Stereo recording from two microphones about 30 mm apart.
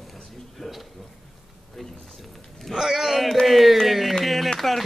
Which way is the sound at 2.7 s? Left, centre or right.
Centre.